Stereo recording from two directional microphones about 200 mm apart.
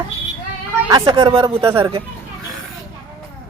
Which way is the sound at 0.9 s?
20° right (ahead or behind).